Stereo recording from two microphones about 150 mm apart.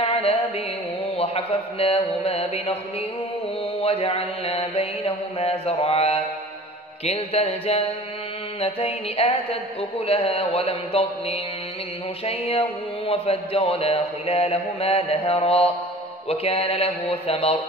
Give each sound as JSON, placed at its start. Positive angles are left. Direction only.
{"t": 0.0, "sound": "music", "side_deg": 40}
{"t": 1.1, "sound": "speech", "side_deg": 40}
{"t": 3.8, "sound": "speech", "side_deg": 40}